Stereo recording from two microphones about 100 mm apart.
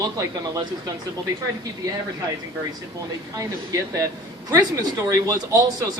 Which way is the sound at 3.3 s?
35° right (ahead or behind).